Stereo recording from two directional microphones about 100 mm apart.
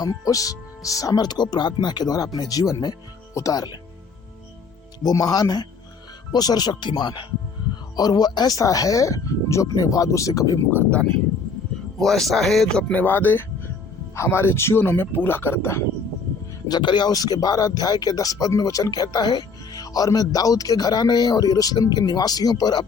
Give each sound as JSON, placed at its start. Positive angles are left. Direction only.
{"t": 0.0, "sound": "speech", "side_deg": 35}
{"t": 5.0, "sound": "speech", "side_deg": 40}
{"t": 10.7, "sound": "speech", "side_deg": 15}
{"t": 11.9, "sound": "speech", "side_deg": 5}
{"t": 12.9, "sound": "speech", "side_deg": 20}
{"t": 16.6, "sound": "speech", "side_deg": 45}